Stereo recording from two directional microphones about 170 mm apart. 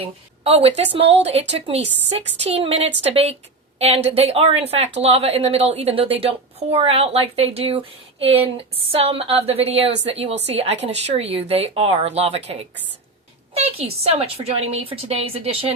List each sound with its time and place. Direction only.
0.0 s a woman's voice: 35° right (ahead or behind)